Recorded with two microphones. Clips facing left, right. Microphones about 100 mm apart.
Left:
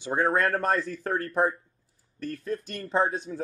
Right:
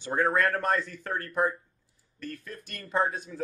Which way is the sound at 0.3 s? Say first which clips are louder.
Left 2 dB; 30° left (ahead or behind).